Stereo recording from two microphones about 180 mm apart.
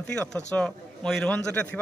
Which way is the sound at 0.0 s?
5° left (ahead or behind).